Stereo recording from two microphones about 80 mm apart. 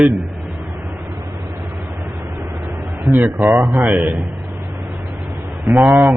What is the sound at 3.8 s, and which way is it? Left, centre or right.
Speech, centre.